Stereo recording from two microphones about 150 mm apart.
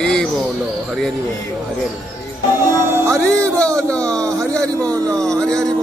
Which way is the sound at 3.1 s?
5° left (ahead or behind).